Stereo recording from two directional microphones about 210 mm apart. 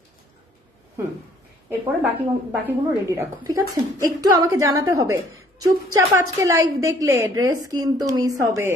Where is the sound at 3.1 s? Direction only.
15° right (ahead or behind).